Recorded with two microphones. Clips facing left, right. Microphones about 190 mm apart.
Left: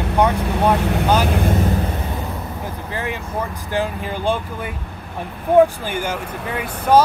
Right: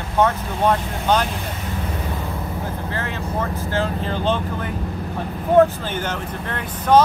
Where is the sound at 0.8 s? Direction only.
70° left (ahead or behind).